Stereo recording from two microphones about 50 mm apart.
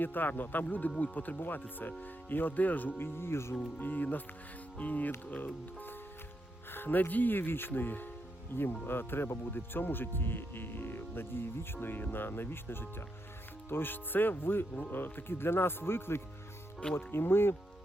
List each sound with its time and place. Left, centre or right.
0.0 s speech: left
3.0 s speech: left
3.5 s speech: left